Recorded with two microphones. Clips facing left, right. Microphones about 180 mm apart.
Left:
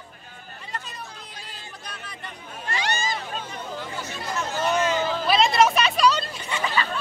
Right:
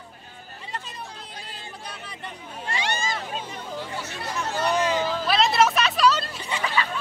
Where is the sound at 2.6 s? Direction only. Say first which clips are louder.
Left 1 dB; 25° right (ahead or behind).